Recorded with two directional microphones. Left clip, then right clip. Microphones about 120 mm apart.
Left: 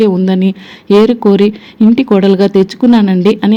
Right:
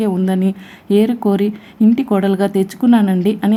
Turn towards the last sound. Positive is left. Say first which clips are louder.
# left 6 dB
turn(degrees=20)  # may be behind; listen again after turning